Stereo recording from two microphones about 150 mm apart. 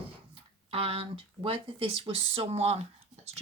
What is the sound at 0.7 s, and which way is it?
Speech, 40° right (ahead or behind).